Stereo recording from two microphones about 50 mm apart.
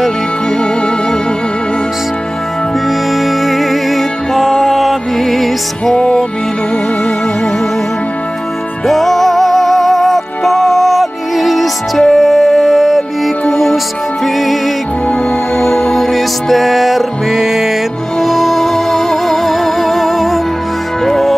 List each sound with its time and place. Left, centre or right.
3.2 s music: centre
5.9 s music: centre
8.8 s music: centre
15.5 s music: left
15.8 s music: centre
18.2 s music: centre